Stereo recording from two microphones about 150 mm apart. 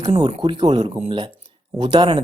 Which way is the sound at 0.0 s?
40° right (ahead or behind).